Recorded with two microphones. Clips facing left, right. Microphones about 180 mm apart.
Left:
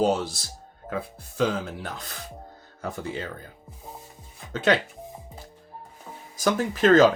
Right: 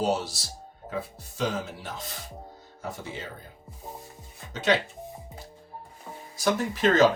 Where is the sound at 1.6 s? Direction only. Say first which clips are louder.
Left 3 dB; 60° left (ahead or behind).